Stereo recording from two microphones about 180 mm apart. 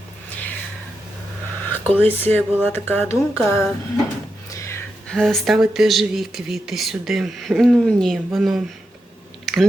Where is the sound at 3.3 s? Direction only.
Centre (ahead or behind).